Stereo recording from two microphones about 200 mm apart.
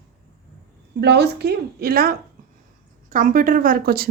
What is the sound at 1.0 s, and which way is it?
Speech, 55° right (ahead or behind).